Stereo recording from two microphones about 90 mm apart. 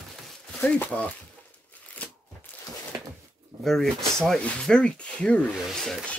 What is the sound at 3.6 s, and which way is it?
Speech, 5° left (ahead or behind).